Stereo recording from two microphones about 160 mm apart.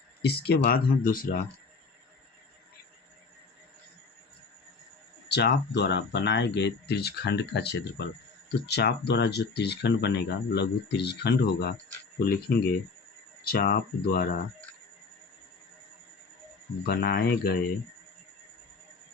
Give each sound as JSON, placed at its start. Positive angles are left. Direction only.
{"t": 0.2, "sound": "speech", "side_deg": 90}
{"t": 5.3, "sound": "speech", "side_deg": 90}
{"t": 12.2, "sound": "speech", "side_deg": 75}
{"t": 16.8, "sound": "speech", "side_deg": 80}